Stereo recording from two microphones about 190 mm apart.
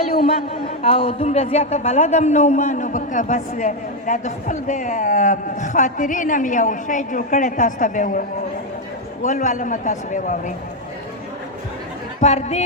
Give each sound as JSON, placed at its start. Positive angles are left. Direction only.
{"t": 0.3, "sound": "a woman's voice", "side_deg": 30}
{"t": 9.2, "sound": "a woman's voice", "side_deg": 40}
{"t": 12.2, "sound": "a woman's voice", "side_deg": 35}